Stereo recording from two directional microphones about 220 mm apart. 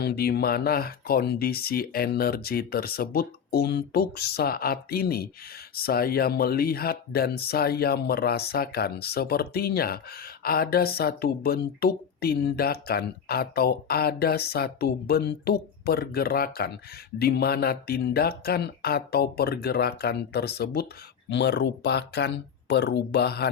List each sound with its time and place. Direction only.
0.0 s speech: 45° left (ahead or behind)